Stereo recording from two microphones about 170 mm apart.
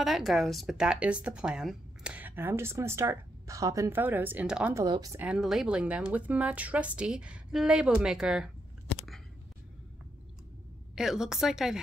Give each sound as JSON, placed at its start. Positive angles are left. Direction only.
{"t": 0.0, "sound": "speech", "side_deg": 0}
{"t": 4.7, "sound": "speech", "side_deg": -20}
{"t": 5.2, "sound": "speech", "side_deg": -5}
{"t": 11.0, "sound": "a woman's voice", "side_deg": -5}